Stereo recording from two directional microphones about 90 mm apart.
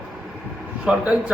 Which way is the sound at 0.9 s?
10° right (ahead or behind).